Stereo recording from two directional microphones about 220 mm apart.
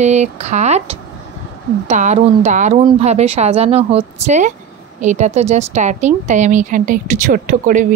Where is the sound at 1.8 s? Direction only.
30° right (ahead or behind).